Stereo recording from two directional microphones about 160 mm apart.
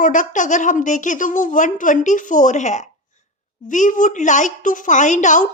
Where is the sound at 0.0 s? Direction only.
55° left (ahead or behind).